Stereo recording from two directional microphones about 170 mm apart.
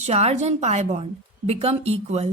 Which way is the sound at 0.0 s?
40° right (ahead or behind).